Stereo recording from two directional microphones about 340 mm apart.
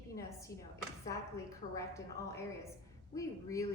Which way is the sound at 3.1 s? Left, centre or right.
Centre.